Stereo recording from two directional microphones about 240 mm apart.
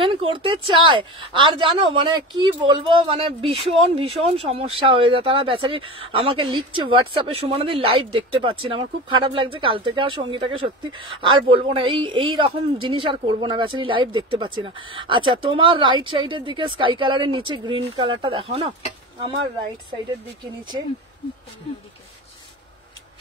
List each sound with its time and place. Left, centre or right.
0.0 s speech: right